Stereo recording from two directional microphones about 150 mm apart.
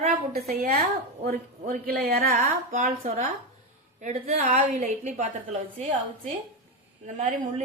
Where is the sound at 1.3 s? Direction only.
75° right (ahead or behind); by 5.3 s 55° right (ahead or behind).